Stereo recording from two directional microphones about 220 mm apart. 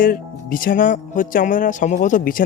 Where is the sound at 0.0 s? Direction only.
40° left (ahead or behind).